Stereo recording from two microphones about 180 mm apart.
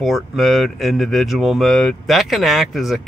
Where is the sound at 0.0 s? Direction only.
Centre (ahead or behind).